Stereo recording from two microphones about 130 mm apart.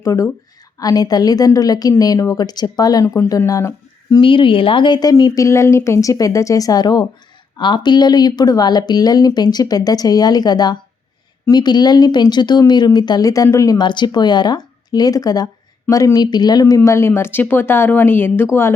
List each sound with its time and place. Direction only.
0.0 s a woman's voice: 25° left (ahead or behind)
4.2 s a woman's voice: 40° left (ahead or behind); by 18.4 s 15° left (ahead or behind)